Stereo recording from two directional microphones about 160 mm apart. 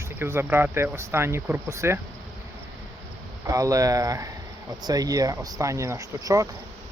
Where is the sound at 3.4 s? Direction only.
20° right (ahead or behind).